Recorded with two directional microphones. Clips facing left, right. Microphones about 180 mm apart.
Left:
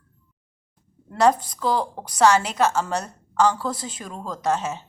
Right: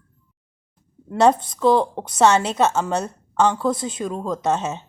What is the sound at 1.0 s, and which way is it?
A woman's voice, 25° right (ahead or behind).